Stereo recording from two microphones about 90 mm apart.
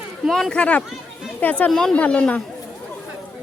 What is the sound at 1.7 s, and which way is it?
Speech, 5° left (ahead or behind).